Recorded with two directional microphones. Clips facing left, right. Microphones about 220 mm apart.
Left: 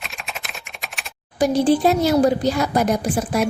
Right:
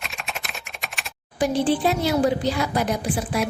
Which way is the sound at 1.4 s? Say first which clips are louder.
Left 4 dB; 40° left (ahead or behind).